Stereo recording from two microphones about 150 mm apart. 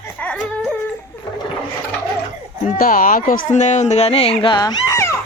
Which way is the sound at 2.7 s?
65° left (ahead or behind).